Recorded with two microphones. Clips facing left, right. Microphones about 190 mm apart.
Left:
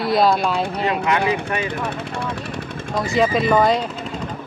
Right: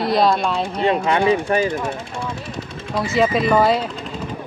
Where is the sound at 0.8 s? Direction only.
30° right (ahead or behind).